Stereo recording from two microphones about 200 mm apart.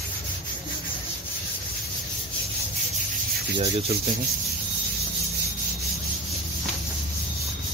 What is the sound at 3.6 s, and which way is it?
Speech, 30° right (ahead or behind).